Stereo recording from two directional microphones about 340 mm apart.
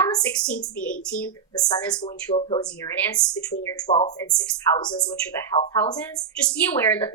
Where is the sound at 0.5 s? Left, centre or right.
Left.